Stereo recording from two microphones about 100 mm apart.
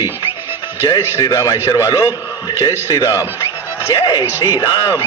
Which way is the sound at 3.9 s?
45° left (ahead or behind).